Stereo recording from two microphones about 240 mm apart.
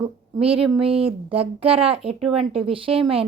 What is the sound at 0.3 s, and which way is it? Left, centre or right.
A woman's voice, right.